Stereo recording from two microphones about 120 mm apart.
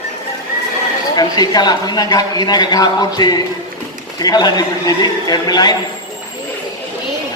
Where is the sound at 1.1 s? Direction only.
35° left (ahead or behind).